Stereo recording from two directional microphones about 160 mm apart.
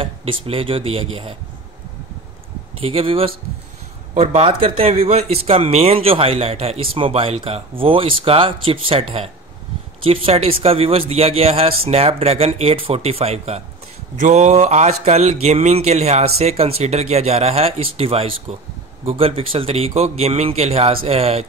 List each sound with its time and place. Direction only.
0.0 s speech: 35° right (ahead or behind)
2.8 s speech: 35° right (ahead or behind)
10.0 s speech: 35° right (ahead or behind)